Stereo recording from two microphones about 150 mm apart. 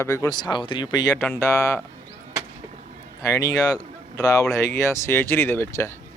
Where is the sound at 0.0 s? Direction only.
20° left (ahead or behind).